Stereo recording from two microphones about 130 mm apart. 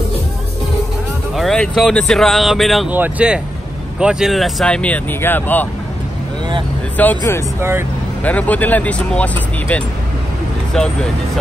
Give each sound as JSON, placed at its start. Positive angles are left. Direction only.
{"t": 1.3, "sound": "speech", "side_deg": 0}
{"t": 2.9, "sound": "speech", "side_deg": -10}
{"t": 7.0, "sound": "speech", "side_deg": 15}